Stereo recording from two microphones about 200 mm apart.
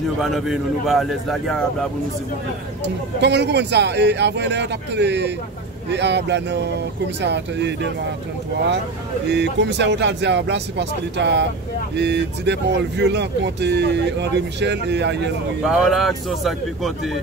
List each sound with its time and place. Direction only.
0.2 s speech: centre (ahead or behind)
2.8 s speech: 60° right (ahead or behind)
9.3 s speech: 60° right (ahead or behind)
15.6 s speech: centre (ahead or behind)